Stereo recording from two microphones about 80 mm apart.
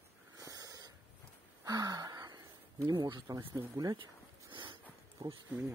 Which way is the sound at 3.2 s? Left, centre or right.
Right.